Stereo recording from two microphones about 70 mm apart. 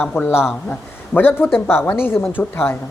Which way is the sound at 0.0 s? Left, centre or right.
Left.